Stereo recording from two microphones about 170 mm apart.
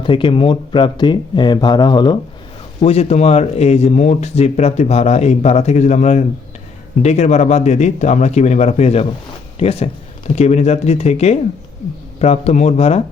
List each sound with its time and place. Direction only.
0.0 s speech: 30° left (ahead or behind)
2.8 s speech: 35° left (ahead or behind)